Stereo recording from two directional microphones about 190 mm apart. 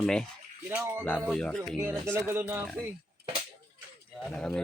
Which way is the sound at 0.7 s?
10° right (ahead or behind).